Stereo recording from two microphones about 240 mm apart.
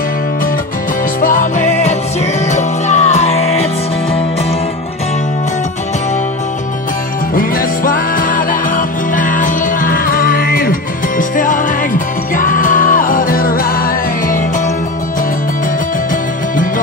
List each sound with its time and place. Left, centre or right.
1.2 s music: left
7.3 s music: left